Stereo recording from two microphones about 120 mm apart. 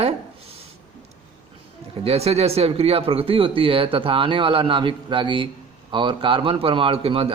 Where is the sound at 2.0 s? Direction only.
60° right (ahead or behind).